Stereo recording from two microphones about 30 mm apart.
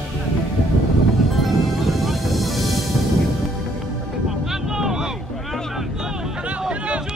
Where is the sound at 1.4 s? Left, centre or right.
Centre.